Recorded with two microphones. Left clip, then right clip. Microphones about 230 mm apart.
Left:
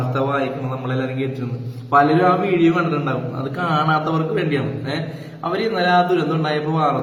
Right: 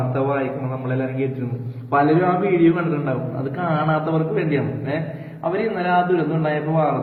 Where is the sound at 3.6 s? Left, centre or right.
Centre.